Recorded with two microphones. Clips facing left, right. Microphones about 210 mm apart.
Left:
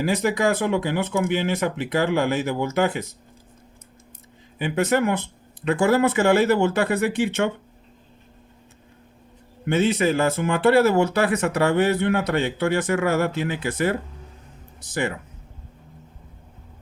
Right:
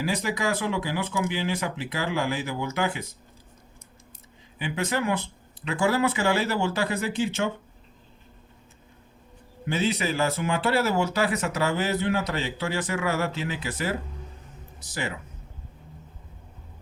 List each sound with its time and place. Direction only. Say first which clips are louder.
0.0 s speech: left 6 dB; 55° left (ahead or behind)
4.5 s speech: left 7 dB; 50° left (ahead or behind)
9.6 s speech: left 6 dB; 55° left (ahead or behind)